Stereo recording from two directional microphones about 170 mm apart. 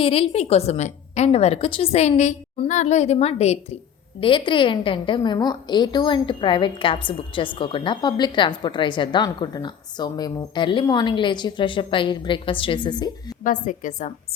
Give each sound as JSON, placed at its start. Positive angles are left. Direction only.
{"t": 0.0, "sound": "a woman's voice", "side_deg": 35}
{"t": 13.4, "sound": "a woman's voice", "side_deg": 50}